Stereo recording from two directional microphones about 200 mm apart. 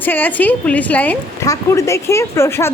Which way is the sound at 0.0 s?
10° left (ahead or behind).